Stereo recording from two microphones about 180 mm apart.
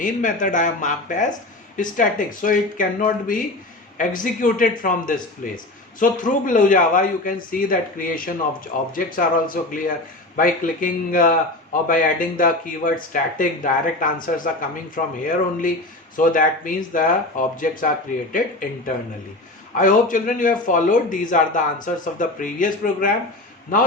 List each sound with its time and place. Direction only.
0.0 s a man's voice: 45° left (ahead or behind)
19.7 s a man's voice: 45° left (ahead or behind)